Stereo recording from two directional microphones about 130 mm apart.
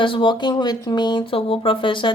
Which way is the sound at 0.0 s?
40° left (ahead or behind).